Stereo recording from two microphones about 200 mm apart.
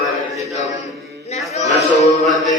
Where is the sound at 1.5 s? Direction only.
35° left (ahead or behind).